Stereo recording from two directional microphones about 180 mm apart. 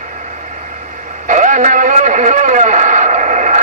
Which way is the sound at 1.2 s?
45° right (ahead or behind).